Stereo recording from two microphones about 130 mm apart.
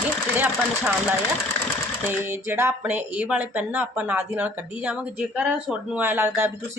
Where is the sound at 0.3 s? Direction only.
10° right (ahead or behind).